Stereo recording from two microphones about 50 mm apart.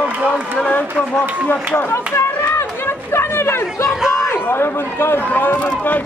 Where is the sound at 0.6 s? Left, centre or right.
Left.